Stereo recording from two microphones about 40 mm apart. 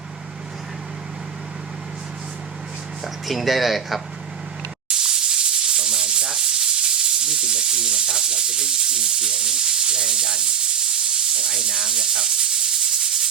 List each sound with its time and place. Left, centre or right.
3.0 s speech: centre
4.9 s sanding: centre